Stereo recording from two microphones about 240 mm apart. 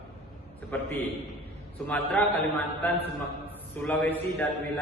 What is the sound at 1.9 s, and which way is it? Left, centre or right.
Speech, centre.